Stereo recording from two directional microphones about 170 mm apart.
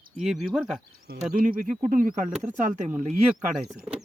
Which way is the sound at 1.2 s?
45° right (ahead or behind).